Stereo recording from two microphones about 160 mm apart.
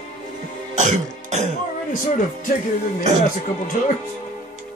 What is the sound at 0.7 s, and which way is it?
Music, 50° right (ahead or behind).